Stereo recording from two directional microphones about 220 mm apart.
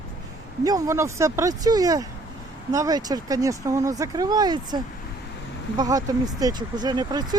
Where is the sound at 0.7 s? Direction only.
15° right (ahead or behind).